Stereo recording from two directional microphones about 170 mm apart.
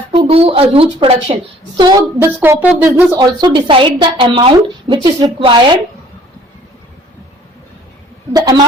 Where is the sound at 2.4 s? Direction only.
10° right (ahead or behind).